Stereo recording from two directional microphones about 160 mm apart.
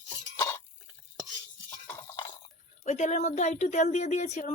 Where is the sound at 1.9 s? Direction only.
20° left (ahead or behind).